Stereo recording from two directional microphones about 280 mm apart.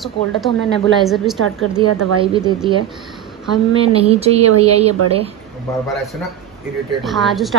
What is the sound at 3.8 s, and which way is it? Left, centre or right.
Speech, right.